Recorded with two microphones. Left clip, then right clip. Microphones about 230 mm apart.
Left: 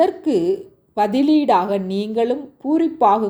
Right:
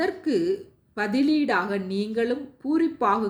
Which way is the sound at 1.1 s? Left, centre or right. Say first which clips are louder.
Left 4 dB; centre.